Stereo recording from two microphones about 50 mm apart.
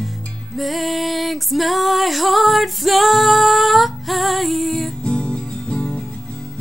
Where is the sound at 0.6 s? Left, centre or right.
Centre.